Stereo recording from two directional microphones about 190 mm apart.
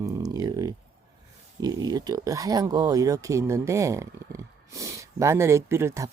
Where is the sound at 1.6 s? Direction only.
20° right (ahead or behind).